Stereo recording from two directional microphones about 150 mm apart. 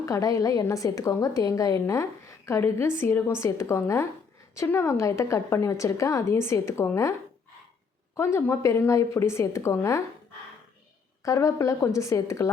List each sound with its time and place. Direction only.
0.0 s a woman's voice: 25° left (ahead or behind)
8.1 s a woman's voice: 15° left (ahead or behind)
11.2 s a woman's voice: 20° left (ahead or behind)